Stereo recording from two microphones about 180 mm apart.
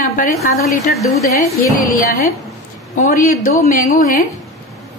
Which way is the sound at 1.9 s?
50° left (ahead or behind).